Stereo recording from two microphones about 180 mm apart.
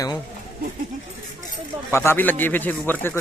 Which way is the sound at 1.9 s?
15° left (ahead or behind).